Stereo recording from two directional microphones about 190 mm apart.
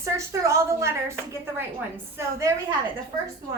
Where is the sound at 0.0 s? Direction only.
15° right (ahead or behind).